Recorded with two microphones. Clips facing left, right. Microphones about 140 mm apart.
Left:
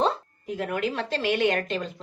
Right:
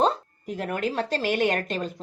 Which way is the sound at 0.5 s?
40° right (ahead or behind).